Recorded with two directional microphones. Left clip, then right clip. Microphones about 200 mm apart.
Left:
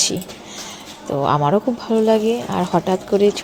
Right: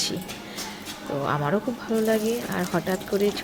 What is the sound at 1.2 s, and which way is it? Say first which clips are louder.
Speech: left 9 dB; 25° left (ahead or behind).